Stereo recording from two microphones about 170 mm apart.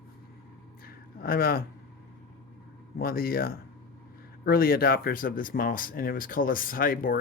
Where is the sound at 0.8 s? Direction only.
60° left (ahead or behind).